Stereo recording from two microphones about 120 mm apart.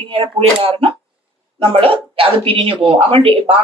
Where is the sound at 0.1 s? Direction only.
50° right (ahead or behind).